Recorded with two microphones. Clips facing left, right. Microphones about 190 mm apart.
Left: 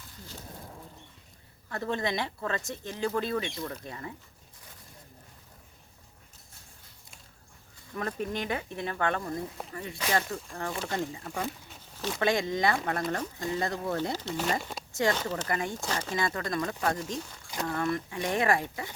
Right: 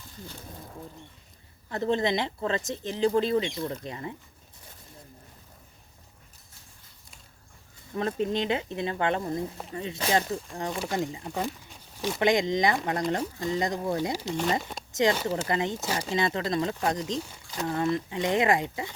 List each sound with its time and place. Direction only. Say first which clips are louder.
1.7 s speech: right 5 dB; 20° right (ahead or behind)
7.9 s speech: right 5 dB; 25° right (ahead or behind)
14.6 s speech: even; centre (ahead or behind)
14.9 s speech: right 4 dB; 20° right (ahead or behind)
15.4 s speech: right 4 dB; 20° right (ahead or behind)
15.8 s speech: right 3 dB; 10° right (ahead or behind)